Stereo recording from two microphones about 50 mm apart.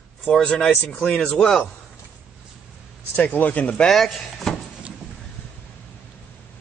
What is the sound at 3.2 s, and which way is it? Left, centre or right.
Speech, left.